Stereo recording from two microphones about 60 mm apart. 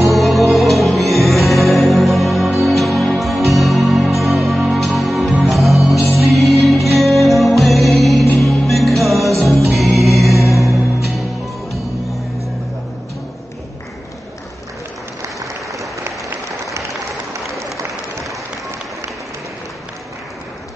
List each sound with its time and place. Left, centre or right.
0.1 s music: centre
15.2 s applause: right